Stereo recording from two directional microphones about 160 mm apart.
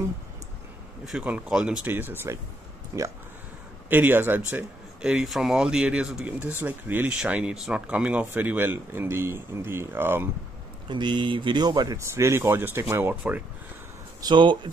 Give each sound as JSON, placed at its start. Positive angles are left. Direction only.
{"t": 1.0, "sound": "speech", "side_deg": -5}
{"t": 10.9, "sound": "speech", "side_deg": -30}
{"t": 14.2, "sound": "speech", "side_deg": -30}